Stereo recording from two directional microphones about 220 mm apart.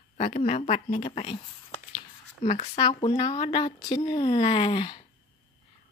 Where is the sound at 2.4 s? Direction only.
30° left (ahead or behind).